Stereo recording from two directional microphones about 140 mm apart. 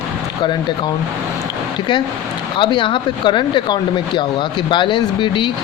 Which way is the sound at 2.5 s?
35° left (ahead or behind).